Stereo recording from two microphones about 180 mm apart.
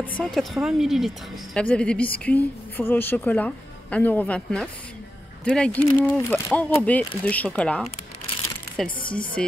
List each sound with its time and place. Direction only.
0.2 s a woman's voice: centre (ahead or behind)